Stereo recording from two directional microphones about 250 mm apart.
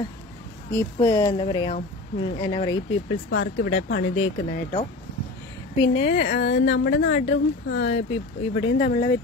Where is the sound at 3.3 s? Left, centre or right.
Left.